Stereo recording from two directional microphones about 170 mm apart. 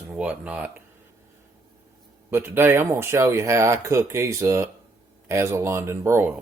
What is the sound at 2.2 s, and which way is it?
Speech, 10° right (ahead or behind).